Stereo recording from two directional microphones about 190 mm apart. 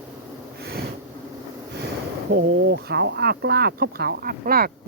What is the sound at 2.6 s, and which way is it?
Speech, 55° right (ahead or behind).